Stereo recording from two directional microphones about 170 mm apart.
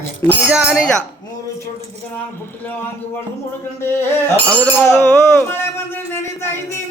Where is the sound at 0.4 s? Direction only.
5° right (ahead or behind).